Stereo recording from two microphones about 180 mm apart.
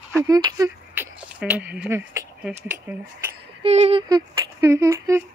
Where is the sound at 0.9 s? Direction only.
10° right (ahead or behind).